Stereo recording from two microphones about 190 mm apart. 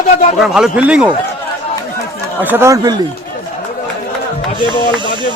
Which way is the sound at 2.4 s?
10° right (ahead or behind).